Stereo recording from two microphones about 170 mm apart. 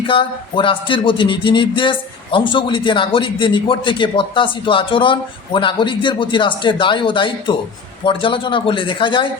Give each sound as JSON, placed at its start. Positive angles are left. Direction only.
{"t": 0.1, "sound": "speech", "side_deg": 30}